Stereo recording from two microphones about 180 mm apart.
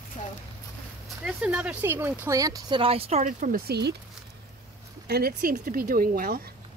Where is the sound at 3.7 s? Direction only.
65° right (ahead or behind).